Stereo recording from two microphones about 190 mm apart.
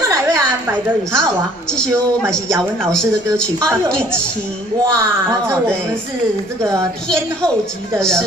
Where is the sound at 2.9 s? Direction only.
5° left (ahead or behind).